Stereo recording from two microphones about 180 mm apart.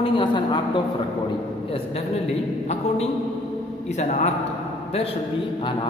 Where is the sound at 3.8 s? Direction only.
40° left (ahead or behind).